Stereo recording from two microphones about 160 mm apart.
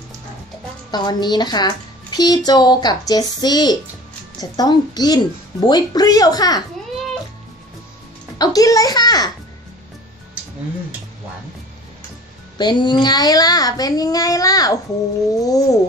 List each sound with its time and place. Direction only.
0.9 s a woman's voice: 25° left (ahead or behind)
8.4 s a woman's voice: 20° left (ahead or behind)
12.5 s a woman's voice: 30° left (ahead or behind)